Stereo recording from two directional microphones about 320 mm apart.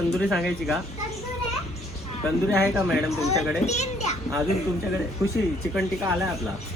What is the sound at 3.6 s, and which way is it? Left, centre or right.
Speech, left.